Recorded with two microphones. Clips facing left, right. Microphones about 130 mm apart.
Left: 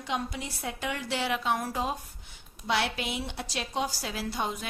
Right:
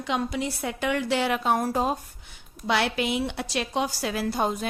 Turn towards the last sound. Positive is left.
turn(degrees=-40)  # may be behind; listen again after turning